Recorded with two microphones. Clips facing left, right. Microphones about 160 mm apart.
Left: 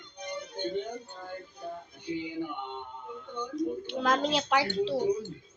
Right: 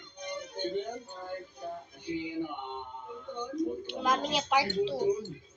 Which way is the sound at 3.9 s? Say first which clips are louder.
Left 3 dB; 10° right (ahead or behind).